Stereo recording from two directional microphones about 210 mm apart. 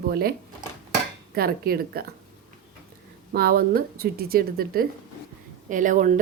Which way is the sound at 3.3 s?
45° right (ahead or behind).